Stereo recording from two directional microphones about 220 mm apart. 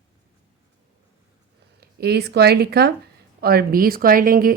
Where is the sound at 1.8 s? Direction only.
45° right (ahead or behind).